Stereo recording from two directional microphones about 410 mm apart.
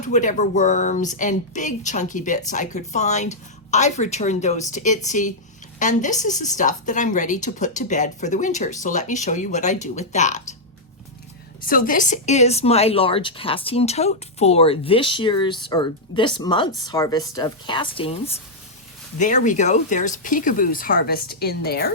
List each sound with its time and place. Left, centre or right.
0.0 s speech: centre
11.6 s speech: centre